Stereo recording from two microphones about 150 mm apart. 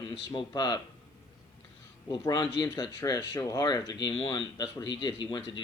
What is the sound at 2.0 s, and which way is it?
Speech, 25° left (ahead or behind).